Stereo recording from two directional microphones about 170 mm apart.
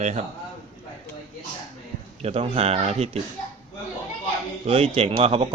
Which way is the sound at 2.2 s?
35° right (ahead or behind).